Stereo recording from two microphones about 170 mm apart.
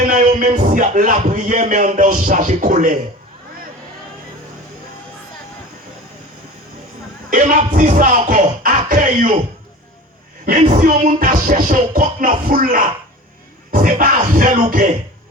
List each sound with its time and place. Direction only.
0.1 s music: 50° right (ahead or behind)
7.3 s music: 50° right (ahead or behind)
10.4 s music: 45° right (ahead or behind)